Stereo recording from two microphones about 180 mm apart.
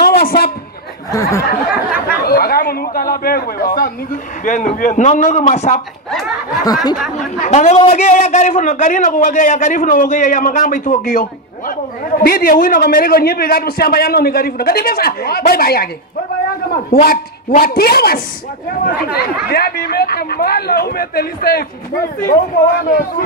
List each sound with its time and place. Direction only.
0.0 s a sound: 55° left (ahead or behind)
1.1 s speech: 20° left (ahead or behind)
1.9 s a man's voice: 55° left (ahead or behind)
6.6 s speech: 20° left (ahead or behind)
7.4 s a man's voice: 40° left (ahead or behind); by 21.6 s 55° left (ahead or behind)
22.8 s a man's voice: 50° left (ahead or behind)